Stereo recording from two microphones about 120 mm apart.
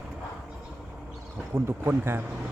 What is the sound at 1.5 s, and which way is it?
Speech, 20° right (ahead or behind).